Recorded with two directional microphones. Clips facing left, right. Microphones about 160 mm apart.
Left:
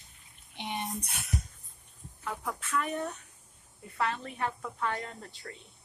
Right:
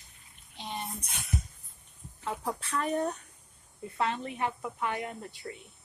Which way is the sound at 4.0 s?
20° right (ahead or behind).